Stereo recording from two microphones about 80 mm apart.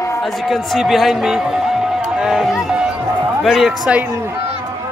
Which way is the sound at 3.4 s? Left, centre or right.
Centre.